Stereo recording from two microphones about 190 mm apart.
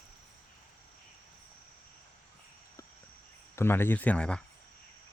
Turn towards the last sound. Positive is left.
turn(degrees=5)  # may be behind; listen again after turning